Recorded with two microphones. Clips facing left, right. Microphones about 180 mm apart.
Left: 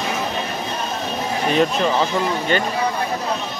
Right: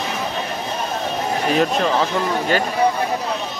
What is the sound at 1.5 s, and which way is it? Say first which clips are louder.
Speech: left 1 dB; centre (ahead or behind).